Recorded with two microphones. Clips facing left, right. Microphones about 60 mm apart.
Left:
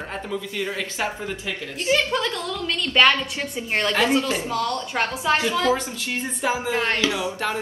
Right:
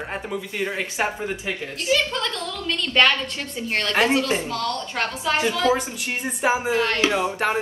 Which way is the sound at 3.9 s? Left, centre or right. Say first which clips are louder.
Right 2 dB; right.